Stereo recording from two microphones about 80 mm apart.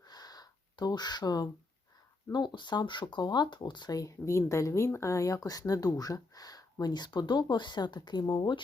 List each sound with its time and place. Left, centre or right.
0.0 s gasp: left
2.3 s speech: left
3.9 s speech: left